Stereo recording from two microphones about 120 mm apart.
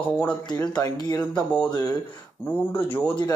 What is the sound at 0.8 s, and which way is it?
A man's voice, 30° left (ahead or behind).